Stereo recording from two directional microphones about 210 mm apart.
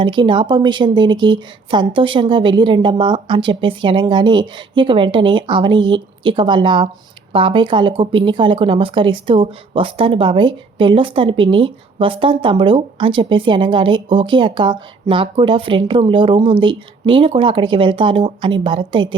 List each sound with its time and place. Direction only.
0.0 s speech: 20° right (ahead or behind)